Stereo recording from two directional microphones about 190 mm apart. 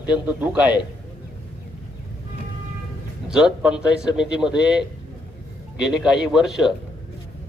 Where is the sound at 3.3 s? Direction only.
5° right (ahead or behind).